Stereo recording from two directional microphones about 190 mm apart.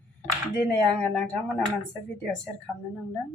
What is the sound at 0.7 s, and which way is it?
Speech, 5° left (ahead or behind).